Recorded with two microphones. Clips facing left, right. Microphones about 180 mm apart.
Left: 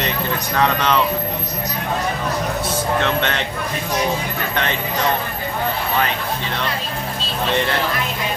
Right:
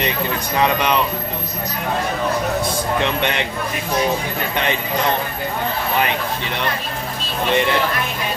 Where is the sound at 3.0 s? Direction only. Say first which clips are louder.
Even; 15° right (ahead or behind).